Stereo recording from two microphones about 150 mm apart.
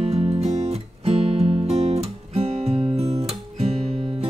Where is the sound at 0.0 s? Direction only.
40° right (ahead or behind).